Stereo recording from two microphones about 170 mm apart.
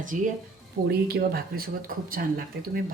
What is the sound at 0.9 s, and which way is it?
Speech, 65° right (ahead or behind).